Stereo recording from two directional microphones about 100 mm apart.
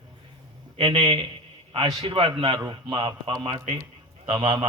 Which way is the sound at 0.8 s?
50° right (ahead or behind).